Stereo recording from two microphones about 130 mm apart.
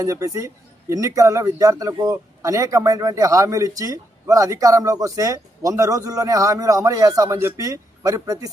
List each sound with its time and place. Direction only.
0.0 s speech: 25° right (ahead or behind)